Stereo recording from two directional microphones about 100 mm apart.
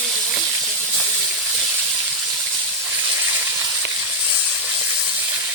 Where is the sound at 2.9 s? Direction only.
15° right (ahead or behind).